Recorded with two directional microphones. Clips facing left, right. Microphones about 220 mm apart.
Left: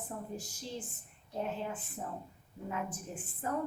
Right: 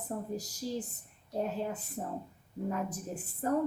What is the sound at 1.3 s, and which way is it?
A woman's voice, 40° right (ahead or behind).